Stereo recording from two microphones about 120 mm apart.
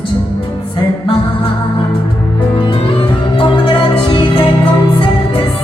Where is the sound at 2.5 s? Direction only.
45° left (ahead or behind).